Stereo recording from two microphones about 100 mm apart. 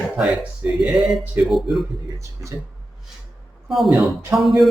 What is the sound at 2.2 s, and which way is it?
Speech, 30° right (ahead or behind).